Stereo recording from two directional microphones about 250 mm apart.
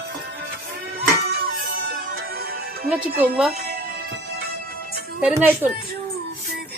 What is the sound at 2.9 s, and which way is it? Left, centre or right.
Speech, centre.